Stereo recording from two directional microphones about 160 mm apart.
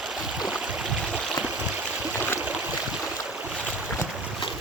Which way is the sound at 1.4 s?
10° right (ahead or behind).